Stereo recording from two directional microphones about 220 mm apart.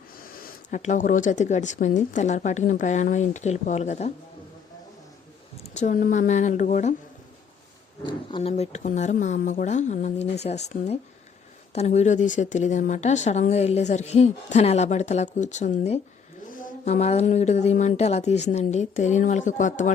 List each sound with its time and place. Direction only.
0.2 s a woman's voice: 40° left (ahead or behind)
5.6 s a woman's voice: 35° left (ahead or behind)
8.0 s a woman's voice: 25° left (ahead or behind)